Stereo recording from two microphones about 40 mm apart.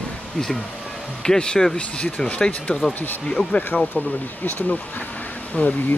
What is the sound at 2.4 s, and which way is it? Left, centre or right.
Speech, left.